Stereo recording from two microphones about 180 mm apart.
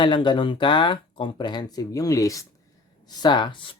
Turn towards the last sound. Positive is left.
turn(degrees=25)  # may be behind; listen again after turning